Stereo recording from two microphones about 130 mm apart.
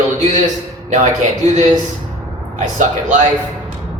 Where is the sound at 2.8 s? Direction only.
75° right (ahead or behind).